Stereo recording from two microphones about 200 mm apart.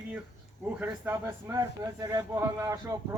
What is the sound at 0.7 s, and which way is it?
Speech, 10° right (ahead or behind).